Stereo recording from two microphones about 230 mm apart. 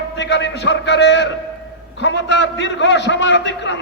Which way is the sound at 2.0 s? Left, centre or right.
Left.